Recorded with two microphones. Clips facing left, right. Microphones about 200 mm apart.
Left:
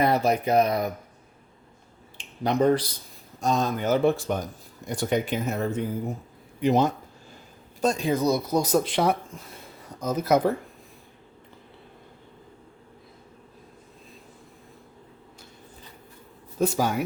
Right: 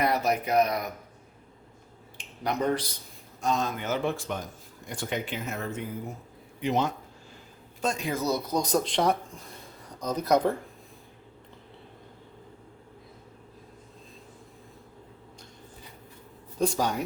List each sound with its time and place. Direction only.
0.0 s speech: 30° left (ahead or behind)
2.1 s speech: 30° left (ahead or behind)
8.1 s speech: 15° left (ahead or behind)
16.6 s speech: 5° left (ahead or behind)